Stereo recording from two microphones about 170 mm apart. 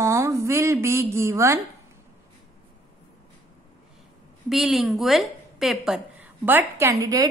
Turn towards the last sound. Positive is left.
turn(degrees=-20)  # may be behind; listen again after turning